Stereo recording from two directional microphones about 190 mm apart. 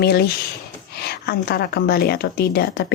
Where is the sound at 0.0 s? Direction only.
55° left (ahead or behind).